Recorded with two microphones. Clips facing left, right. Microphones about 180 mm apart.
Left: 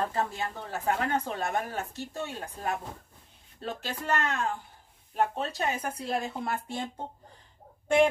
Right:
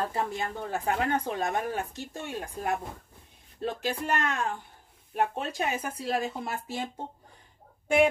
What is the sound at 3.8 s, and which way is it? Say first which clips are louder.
Speech: even; 15° right (ahead or behind).